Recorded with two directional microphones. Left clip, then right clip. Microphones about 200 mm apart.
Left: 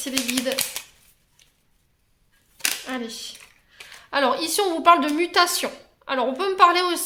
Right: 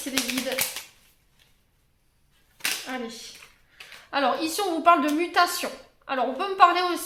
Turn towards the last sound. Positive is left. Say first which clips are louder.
# left 2 dB
turn(degrees=35)  # may be behind; listen again after turning